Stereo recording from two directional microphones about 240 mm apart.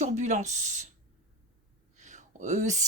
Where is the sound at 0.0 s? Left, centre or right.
Right.